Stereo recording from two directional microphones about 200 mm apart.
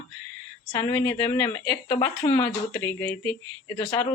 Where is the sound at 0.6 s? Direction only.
15° left (ahead or behind).